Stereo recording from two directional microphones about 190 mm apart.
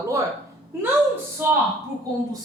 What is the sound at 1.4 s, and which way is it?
Speech, 10° right (ahead or behind).